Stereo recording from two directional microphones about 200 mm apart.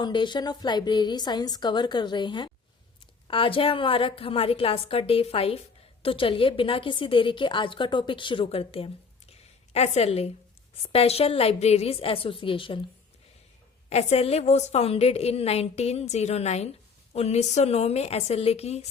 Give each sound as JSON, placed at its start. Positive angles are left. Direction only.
{"t": 0.0, "sound": "a woman's voice", "side_deg": 25}
{"t": 13.9, "sound": "a woman's voice", "side_deg": 30}